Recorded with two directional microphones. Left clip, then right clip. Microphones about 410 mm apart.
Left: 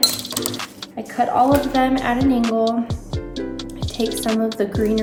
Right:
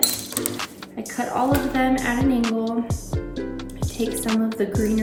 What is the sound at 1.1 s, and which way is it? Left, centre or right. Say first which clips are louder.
A woman's voice: left 6 dB; centre.